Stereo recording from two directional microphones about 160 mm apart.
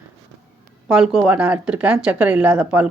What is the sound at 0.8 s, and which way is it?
Speech, 5° right (ahead or behind).